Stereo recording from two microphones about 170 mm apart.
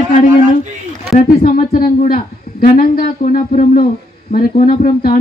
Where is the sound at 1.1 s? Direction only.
50° left (ahead or behind).